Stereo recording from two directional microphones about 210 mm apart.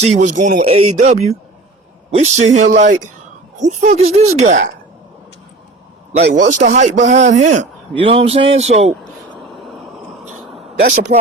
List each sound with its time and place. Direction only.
0.0 s a man's voice: 35° right (ahead or behind)
6.5 s a man's voice: 35° right (ahead or behind)
8.9 s a sound: centre (ahead or behind)
11.1 s speech: 45° right (ahead or behind)